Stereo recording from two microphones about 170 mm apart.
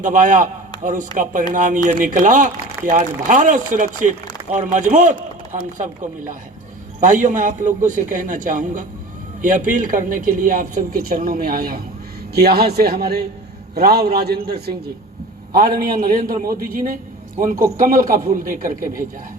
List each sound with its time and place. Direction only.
0.0 s a man's voice: 50° right (ahead or behind)